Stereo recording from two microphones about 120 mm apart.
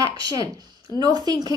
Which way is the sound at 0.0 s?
30° right (ahead or behind).